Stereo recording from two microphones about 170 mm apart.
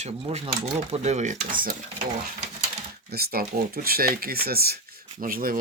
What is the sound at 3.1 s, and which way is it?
Speech, 65° right (ahead or behind).